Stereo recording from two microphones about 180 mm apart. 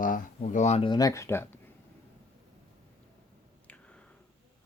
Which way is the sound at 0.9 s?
20° left (ahead or behind).